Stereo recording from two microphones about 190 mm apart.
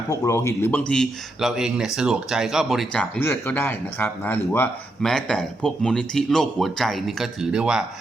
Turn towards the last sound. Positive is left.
turn(degrees=-5)  # may be behind; listen again after turning